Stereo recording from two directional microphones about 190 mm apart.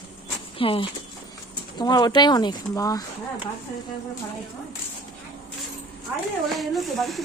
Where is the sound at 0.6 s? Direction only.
30° left (ahead or behind).